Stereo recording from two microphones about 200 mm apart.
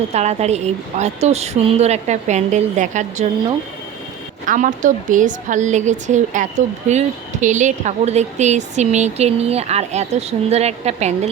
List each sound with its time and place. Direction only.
0.1 s speech: 35° right (ahead or behind)
4.4 s speech: 40° right (ahead or behind)